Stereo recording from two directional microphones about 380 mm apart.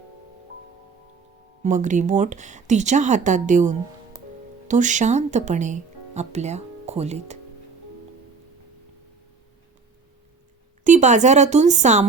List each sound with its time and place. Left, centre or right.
1.6 s speech: centre
10.8 s speech: centre